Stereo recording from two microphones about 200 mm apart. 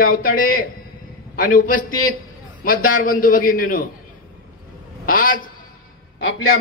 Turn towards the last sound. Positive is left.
turn(degrees=65)  # may be behind; listen again after turning